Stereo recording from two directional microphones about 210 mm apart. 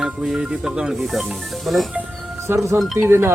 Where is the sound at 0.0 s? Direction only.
Centre (ahead or behind).